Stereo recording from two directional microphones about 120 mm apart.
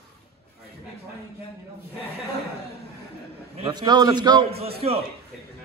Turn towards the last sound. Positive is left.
turn(degrees=-55)  # may be behind; listen again after turning